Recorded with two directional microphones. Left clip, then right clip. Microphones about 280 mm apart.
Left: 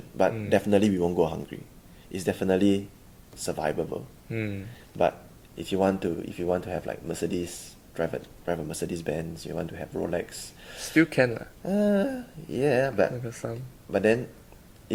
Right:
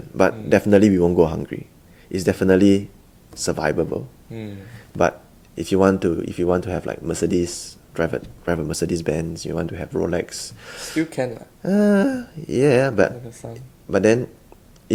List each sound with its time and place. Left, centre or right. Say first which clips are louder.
0.2 s speech: right 7 dB; right
4.3 s speech: left 7 dB; left
5.5 s speech: right 8 dB; right
10.8 s speech: left 1 dB; left
11.6 s speech: right 7 dB; right